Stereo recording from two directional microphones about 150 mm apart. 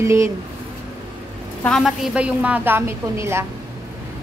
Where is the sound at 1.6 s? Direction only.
5° left (ahead or behind).